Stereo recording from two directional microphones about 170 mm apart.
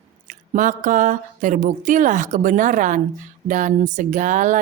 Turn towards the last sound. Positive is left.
turn(degrees=-50)  # may be behind; listen again after turning